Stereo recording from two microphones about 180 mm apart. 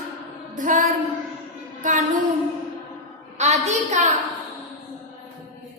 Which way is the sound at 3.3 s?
40° right (ahead or behind).